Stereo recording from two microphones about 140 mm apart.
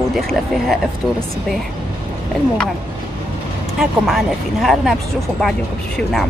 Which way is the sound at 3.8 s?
5° right (ahead or behind).